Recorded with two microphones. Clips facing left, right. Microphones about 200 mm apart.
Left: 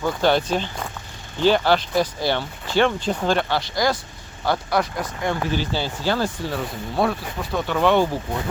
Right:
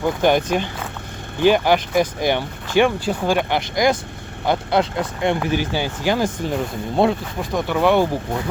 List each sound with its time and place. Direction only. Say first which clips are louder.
0.0 s speech: right 2 dB; 15° right (ahead or behind)
7.6 s speech: right 2 dB; 10° right (ahead or behind)